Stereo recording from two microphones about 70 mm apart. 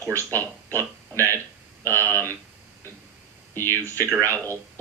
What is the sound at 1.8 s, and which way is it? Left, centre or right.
Speech, right.